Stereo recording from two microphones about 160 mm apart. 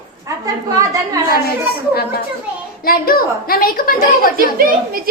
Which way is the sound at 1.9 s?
70° left (ahead or behind).